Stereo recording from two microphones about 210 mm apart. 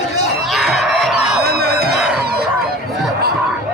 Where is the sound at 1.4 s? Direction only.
50° right (ahead or behind).